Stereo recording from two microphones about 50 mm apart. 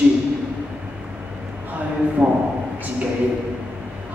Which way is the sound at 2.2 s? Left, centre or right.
Right.